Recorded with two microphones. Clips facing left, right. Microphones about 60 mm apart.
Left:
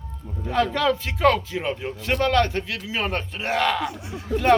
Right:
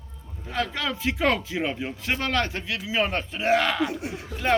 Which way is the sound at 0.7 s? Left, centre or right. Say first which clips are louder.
Left 5 dB; centre.